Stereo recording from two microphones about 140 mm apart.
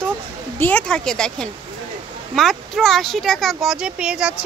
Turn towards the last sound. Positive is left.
turn(degrees=-5)  # may be behind; listen again after turning